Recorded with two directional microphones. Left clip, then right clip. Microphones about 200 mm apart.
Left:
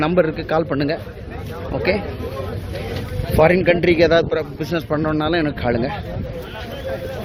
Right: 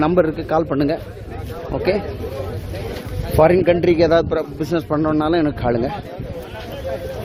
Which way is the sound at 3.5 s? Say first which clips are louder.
Right 1 dB; 15° right (ahead or behind).